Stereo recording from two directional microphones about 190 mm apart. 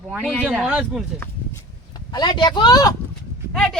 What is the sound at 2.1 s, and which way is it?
Speech, 25° left (ahead or behind).